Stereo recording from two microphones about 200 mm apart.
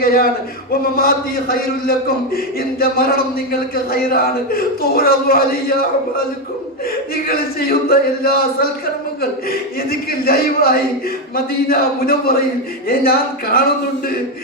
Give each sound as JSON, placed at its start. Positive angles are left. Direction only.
{"t": 0.0, "sound": "a man's voice", "side_deg": 50}
{"t": 7.3, "sound": "a man's voice", "side_deg": 50}
{"t": 9.5, "sound": "a man's voice", "side_deg": 50}